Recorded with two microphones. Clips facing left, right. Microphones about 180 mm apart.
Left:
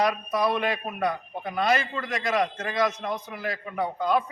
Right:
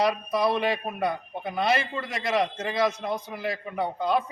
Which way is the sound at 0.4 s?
30° right (ahead or behind).